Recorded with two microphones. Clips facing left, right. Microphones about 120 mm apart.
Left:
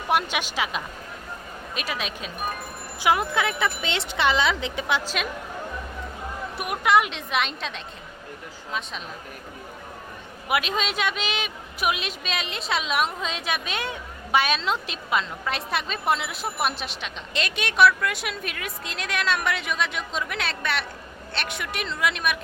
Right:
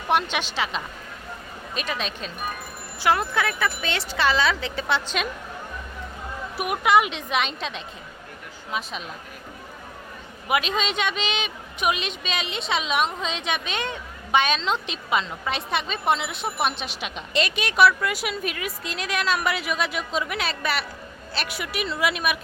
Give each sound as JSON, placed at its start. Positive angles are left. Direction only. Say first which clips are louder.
{"t": 0.1, "sound": "a woman's voice", "louder": "right 1 dB", "side_deg": 10}
{"t": 6.6, "sound": "a woman's voice", "louder": "right 1 dB", "side_deg": 0}
{"t": 10.5, "sound": "a woman's voice", "louder": "right 1 dB", "side_deg": 5}